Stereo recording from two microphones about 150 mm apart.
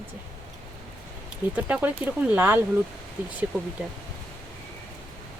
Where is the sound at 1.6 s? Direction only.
10° right (ahead or behind).